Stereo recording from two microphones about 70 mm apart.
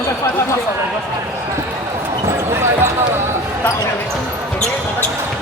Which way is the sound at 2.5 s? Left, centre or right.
Right.